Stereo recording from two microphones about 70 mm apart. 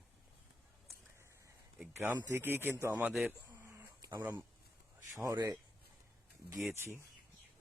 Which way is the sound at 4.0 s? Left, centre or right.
Right.